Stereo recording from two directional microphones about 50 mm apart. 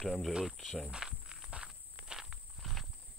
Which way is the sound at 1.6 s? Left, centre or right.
Centre.